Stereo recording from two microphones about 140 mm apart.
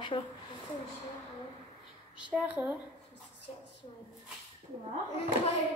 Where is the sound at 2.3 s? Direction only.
10° right (ahead or behind).